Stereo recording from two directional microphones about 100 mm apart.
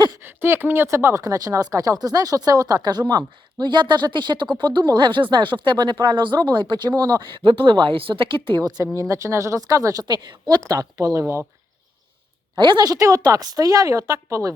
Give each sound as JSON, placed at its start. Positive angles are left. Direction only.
{"t": 0.2, "sound": "speech", "side_deg": -25}
{"t": 9.0, "sound": "speech", "side_deg": -30}
{"t": 12.5, "sound": "speech", "side_deg": -50}